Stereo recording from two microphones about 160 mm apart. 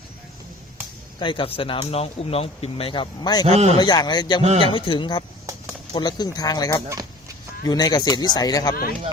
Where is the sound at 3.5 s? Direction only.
40° right (ahead or behind).